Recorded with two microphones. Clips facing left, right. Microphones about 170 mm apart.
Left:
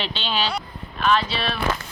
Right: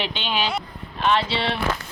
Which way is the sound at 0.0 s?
15° right (ahead or behind).